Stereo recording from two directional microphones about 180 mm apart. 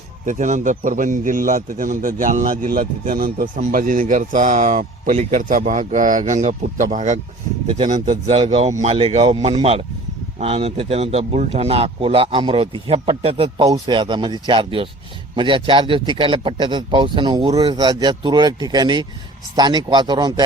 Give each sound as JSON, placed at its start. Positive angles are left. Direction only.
{"t": 0.3, "sound": "a man's voice", "side_deg": -45}